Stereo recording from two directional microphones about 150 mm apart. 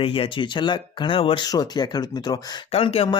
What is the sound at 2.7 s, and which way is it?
Speech, 40° left (ahead or behind).